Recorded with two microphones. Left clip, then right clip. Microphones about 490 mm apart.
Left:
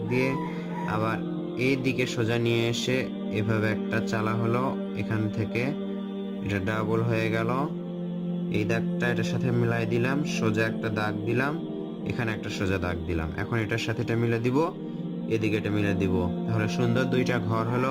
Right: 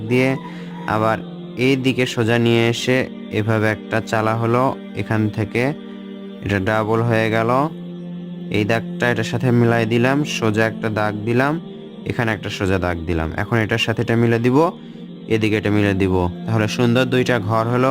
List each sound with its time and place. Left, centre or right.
0.1 s speech: centre